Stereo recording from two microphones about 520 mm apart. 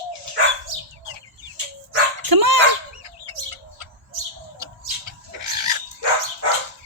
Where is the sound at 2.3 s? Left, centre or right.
Right.